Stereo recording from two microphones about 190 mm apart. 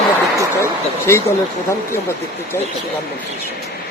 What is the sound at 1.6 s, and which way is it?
Speech, 15° left (ahead or behind).